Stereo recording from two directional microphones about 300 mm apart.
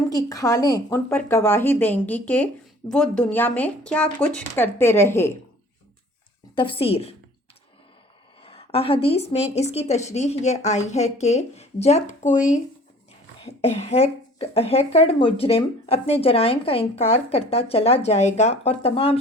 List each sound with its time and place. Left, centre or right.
0.1 s a woman's voice: centre
6.6 s speech: centre
8.4 s speech: centre